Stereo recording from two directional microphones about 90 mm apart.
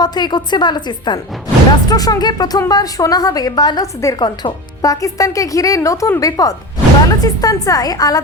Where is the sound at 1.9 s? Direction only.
45° left (ahead or behind).